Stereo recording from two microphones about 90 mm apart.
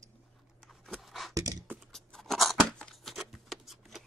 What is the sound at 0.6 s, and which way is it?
Pant, centre (ahead or behind).